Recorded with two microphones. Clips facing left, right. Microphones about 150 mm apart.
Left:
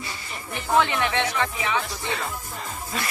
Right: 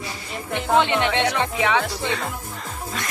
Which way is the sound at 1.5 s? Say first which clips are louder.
Right 6 dB; 75° right (ahead or behind).